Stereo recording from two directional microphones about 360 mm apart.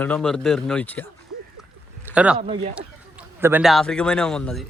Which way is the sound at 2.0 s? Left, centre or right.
Centre.